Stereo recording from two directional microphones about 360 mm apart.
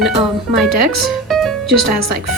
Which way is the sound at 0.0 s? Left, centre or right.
Centre.